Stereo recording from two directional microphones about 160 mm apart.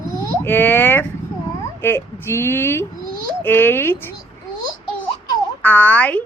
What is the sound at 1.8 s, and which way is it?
Speech, 15° left (ahead or behind).